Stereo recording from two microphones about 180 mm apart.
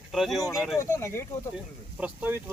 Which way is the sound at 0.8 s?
15° left (ahead or behind).